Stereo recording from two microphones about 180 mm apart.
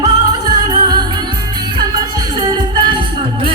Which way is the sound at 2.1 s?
25° right (ahead or behind).